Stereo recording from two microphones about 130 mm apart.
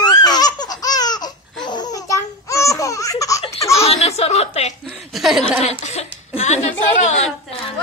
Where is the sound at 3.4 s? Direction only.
55° left (ahead or behind).